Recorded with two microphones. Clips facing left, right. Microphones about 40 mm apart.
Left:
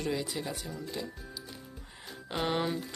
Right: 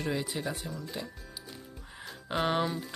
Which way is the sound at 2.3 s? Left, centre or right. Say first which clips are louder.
Right 2 dB; centre.